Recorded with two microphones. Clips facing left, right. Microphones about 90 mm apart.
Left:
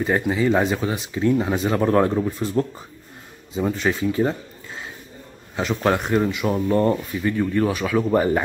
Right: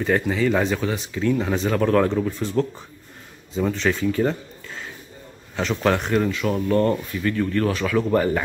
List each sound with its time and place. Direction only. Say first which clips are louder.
0.0 s speech: even; 15° left (ahead or behind)
1.8 s a man's voice: left 1 dB; 20° left (ahead or behind)
6.2 s speech: left 1 dB; 20° left (ahead or behind)